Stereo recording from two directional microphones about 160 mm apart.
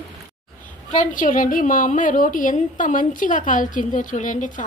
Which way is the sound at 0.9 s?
55° left (ahead or behind).